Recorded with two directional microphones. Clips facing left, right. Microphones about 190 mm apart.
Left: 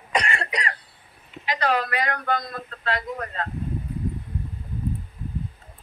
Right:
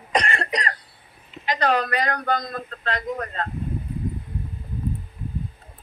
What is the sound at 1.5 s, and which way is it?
A woman's voice, 40° right (ahead or behind).